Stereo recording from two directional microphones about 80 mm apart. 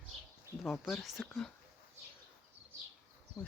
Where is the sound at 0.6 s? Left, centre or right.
Centre.